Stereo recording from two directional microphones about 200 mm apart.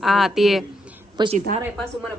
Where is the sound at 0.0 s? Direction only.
Centre (ahead or behind).